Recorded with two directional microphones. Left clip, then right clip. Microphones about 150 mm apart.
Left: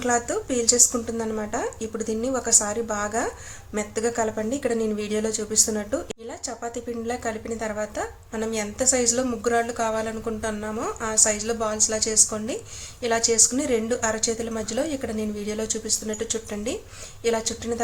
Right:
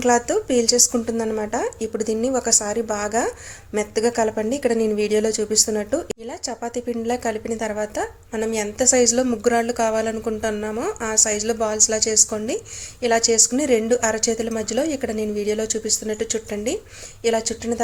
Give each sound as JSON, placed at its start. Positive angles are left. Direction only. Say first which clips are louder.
{"t": 0.0, "sound": "a woman's voice", "louder": "right 6 dB", "side_deg": -35}